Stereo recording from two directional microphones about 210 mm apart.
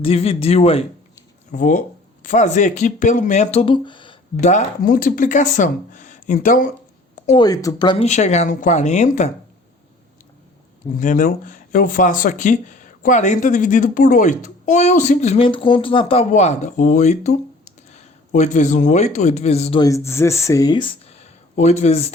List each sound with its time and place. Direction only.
0.0 s a man's voice: 30° left (ahead or behind)
7.3 s a man's voice: 20° left (ahead or behind)
8.0 s speech: 35° left (ahead or behind)
10.9 s speech: 40° left (ahead or behind)
19.8 s speech: 15° left (ahead or behind); by 22.1 s 30° left (ahead or behind)